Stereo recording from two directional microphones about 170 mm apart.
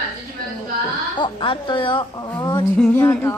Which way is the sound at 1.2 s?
30° left (ahead or behind).